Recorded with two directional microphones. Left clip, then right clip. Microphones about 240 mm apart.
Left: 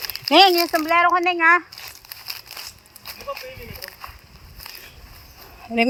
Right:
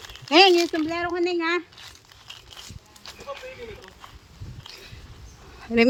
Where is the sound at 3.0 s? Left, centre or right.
Left.